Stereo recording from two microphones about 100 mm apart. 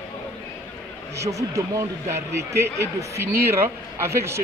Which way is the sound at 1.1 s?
30° right (ahead or behind).